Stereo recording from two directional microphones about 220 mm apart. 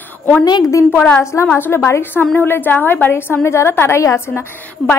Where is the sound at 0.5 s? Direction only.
15° left (ahead or behind).